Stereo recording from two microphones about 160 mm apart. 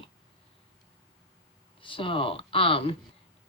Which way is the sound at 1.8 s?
30° left (ahead or behind).